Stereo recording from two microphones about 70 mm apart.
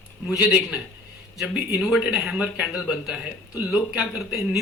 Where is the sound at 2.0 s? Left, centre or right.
Centre.